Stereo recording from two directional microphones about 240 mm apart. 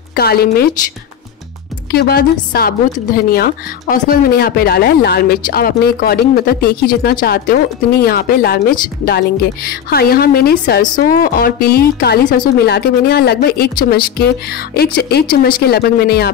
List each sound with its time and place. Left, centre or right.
0.1 s speech: left
1.9 s speech: left